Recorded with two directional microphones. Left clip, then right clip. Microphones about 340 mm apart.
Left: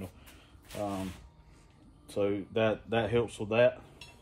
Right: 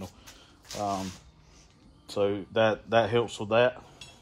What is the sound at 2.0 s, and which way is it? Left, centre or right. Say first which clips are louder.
Speech: right 3 dB; centre.